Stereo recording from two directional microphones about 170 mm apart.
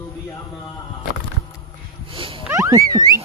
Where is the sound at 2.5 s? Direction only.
20° right (ahead or behind).